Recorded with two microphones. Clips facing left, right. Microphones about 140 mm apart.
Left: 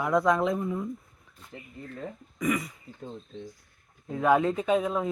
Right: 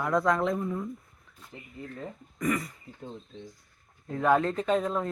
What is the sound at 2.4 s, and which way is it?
Speech, centre (ahead or behind).